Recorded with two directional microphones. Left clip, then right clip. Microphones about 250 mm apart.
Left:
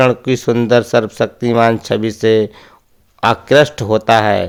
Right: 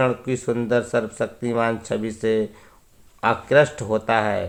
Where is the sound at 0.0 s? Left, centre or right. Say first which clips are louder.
Left 9 dB; left.